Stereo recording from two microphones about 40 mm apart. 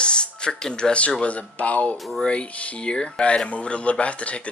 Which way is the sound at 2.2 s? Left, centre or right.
Left.